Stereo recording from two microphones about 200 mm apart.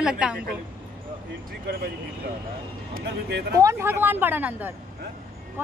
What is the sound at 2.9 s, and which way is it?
Speech, 55° right (ahead or behind).